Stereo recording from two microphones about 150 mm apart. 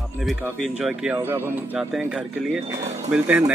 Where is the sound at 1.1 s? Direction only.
15° right (ahead or behind).